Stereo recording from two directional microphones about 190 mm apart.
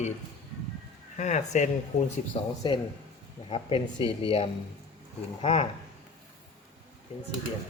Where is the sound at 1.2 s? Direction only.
35° left (ahead or behind).